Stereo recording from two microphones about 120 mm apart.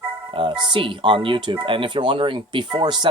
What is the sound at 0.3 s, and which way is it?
Speech, 45° right (ahead or behind).